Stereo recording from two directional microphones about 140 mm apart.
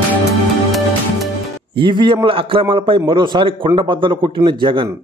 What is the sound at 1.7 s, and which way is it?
A man's voice, 35° right (ahead or behind).